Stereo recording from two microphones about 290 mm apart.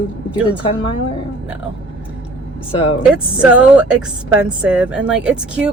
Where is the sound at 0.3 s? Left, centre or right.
Centre.